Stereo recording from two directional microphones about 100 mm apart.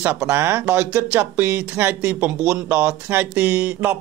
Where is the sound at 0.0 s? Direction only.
20° right (ahead or behind).